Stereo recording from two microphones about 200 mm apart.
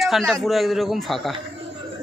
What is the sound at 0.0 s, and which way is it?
A man's voice, centre (ahead or behind).